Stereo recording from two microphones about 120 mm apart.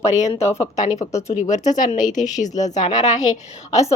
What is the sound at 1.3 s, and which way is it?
Speech, 85° left.